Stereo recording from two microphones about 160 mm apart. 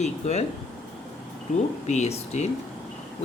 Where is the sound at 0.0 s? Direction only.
45° left (ahead or behind).